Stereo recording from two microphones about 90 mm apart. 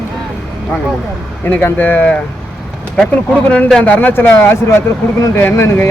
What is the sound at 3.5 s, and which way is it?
Speech, 15° left (ahead or behind).